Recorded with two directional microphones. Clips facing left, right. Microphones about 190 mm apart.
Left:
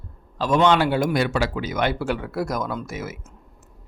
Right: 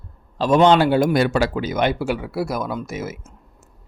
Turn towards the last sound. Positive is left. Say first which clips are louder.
# right 3 dB
turn(degrees=-20)  # may be behind; listen again after turning